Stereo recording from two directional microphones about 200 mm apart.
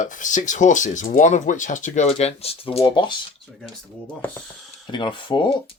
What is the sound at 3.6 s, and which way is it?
Speech, 5° left (ahead or behind).